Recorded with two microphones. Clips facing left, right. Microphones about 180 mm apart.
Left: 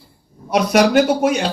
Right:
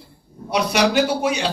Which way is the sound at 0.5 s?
45° left (ahead or behind).